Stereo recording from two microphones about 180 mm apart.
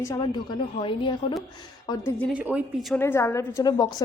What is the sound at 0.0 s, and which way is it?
A woman's voice, 20° left (ahead or behind).